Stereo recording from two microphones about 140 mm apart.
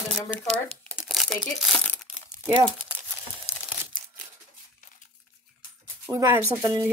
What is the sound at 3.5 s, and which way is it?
Crumpling, 45° left (ahead or behind).